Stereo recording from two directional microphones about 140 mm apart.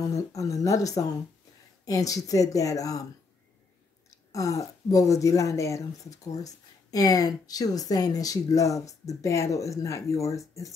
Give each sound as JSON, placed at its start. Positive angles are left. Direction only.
{"t": 0.0, "sound": "speech", "side_deg": 25}
{"t": 4.3, "sound": "speech", "side_deg": 25}